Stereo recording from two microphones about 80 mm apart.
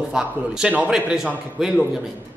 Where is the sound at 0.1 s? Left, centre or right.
Centre.